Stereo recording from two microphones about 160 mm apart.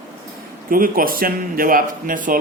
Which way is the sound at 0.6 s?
65° right (ahead or behind).